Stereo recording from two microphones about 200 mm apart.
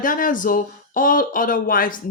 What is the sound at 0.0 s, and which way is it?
Speech, 40° left (ahead or behind).